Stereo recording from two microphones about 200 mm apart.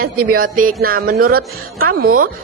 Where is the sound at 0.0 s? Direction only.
45° right (ahead or behind).